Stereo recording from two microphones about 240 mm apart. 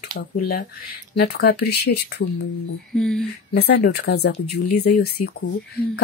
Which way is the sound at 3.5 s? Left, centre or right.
Left.